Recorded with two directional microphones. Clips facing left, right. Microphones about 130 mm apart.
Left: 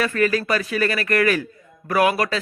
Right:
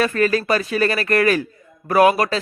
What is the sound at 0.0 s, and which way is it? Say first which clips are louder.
A man's voice: right 2 dB; 30° right (ahead or behind).